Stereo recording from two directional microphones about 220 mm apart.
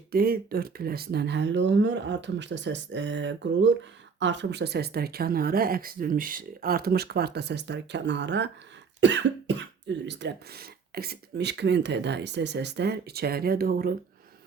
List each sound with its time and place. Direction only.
0.1 s speech: 45° right (ahead or behind)
9.0 s cough: 55° right (ahead or behind)
10.1 s speech: 50° right (ahead or behind)